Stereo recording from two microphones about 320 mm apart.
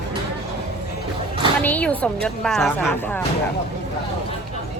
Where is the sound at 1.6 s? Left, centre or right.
Centre.